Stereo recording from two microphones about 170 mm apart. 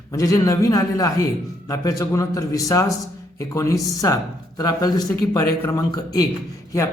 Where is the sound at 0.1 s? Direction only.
20° left (ahead or behind).